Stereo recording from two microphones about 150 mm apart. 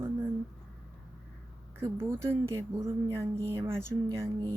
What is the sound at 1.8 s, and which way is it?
Speech, 15° right (ahead or behind).